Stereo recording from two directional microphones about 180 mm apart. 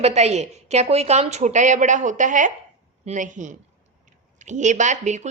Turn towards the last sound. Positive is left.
turn(degrees=-40)  # may be behind; listen again after turning